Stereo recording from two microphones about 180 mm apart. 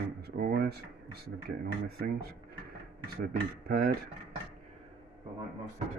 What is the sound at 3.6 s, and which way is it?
Speech, 55° right (ahead or behind).